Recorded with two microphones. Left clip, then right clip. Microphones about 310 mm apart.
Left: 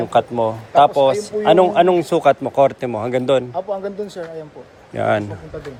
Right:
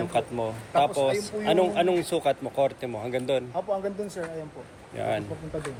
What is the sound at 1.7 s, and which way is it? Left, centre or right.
Speech, centre.